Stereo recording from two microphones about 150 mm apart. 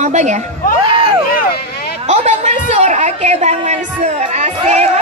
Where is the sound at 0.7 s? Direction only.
30° right (ahead or behind).